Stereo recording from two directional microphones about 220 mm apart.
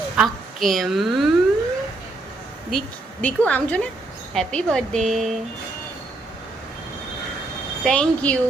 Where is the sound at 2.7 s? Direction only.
5° left (ahead or behind).